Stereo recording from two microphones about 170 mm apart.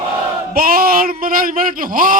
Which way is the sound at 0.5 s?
60° right (ahead or behind).